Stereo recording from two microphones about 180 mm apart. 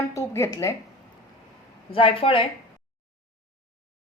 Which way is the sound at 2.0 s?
30° left (ahead or behind).